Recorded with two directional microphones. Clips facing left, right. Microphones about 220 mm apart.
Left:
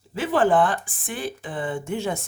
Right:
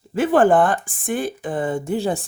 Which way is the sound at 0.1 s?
50° right (ahead or behind).